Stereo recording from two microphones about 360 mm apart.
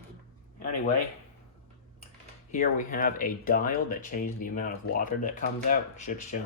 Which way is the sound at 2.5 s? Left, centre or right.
Left.